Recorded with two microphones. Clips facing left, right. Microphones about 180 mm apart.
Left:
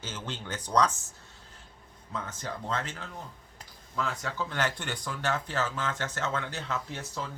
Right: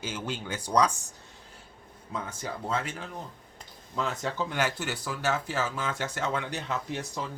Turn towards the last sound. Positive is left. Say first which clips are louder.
# right 3 dB
turn(degrees=-15)  # may be behind; listen again after turning